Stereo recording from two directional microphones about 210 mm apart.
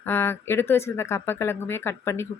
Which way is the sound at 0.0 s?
10° left (ahead or behind).